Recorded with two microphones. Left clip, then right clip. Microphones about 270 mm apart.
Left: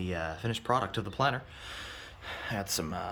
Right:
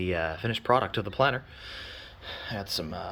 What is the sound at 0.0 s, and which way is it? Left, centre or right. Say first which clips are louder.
Speech: right 6 dB; centre.